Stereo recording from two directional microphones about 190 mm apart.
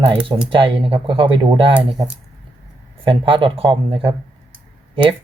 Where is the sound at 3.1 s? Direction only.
25° right (ahead or behind).